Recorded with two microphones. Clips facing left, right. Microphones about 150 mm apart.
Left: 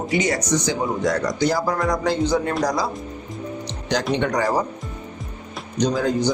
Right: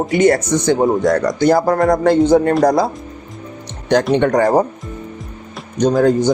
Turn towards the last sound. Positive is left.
turn(degrees=-50)  # may be behind; listen again after turning